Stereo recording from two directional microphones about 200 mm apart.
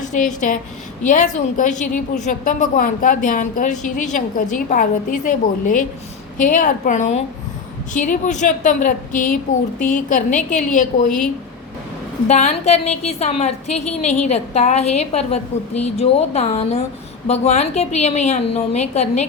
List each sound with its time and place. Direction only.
0.0 s a woman's voice: 40° left (ahead or behind)
12.3 s a woman's voice: 35° left (ahead or behind)